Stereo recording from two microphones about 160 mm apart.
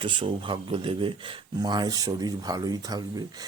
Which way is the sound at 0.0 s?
30° right (ahead or behind).